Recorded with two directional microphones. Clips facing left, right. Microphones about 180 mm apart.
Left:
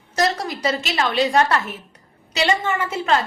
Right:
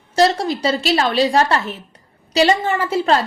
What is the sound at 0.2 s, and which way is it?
A woman's voice, 30° right (ahead or behind).